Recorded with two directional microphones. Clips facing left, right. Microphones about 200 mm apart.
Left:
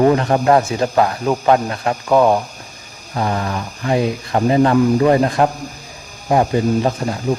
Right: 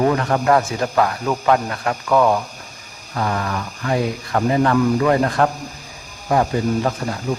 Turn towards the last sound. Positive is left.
turn(degrees=25)  # may be behind; listen again after turning